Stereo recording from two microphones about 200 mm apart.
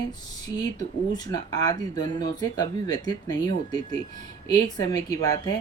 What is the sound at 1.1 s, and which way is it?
Speech, 20° left (ahead or behind).